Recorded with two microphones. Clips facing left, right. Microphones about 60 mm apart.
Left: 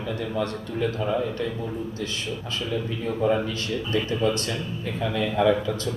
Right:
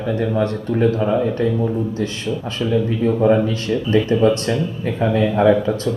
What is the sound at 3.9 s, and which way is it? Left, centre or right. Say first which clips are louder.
Speech: right 9 dB; right.